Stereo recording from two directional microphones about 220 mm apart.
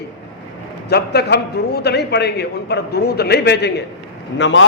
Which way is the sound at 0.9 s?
45° left (ahead or behind).